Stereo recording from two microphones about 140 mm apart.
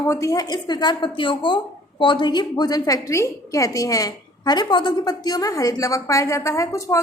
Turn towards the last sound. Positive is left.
turn(degrees=25)  # may be behind; listen again after turning